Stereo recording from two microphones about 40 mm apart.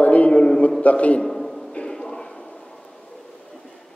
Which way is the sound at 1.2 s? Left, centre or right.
Centre.